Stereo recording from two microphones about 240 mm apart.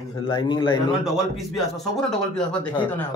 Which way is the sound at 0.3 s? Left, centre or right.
Centre.